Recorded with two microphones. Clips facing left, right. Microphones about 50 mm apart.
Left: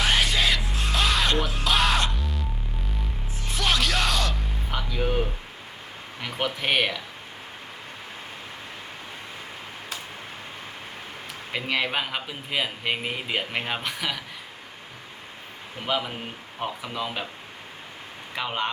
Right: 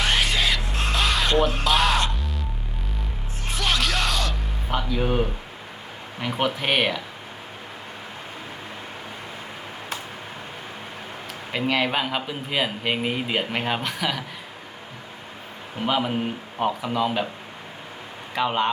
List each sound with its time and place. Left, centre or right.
0.0 s music: centre
3.5 s music: centre
4.9 s music: centre
6.1 s speech: centre
11.5 s speech: centre
15.9 s speech: centre
18.3 s speech: centre